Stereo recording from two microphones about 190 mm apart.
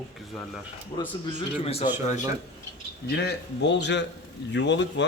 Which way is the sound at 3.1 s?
60° left (ahead or behind).